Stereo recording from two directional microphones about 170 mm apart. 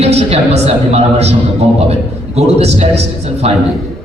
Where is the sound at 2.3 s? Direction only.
40° right (ahead or behind).